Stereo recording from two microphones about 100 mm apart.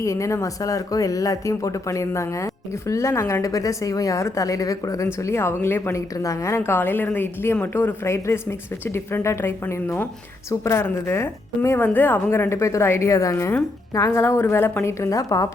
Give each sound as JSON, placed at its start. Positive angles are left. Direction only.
{"t": 0.0, "sound": "a woman's voice", "side_deg": 30}